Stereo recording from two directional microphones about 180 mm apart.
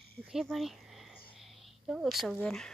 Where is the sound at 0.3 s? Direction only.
Centre (ahead or behind).